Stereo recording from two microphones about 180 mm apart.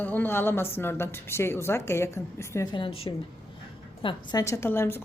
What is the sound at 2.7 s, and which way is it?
A woman's voice, 30° left (ahead or behind).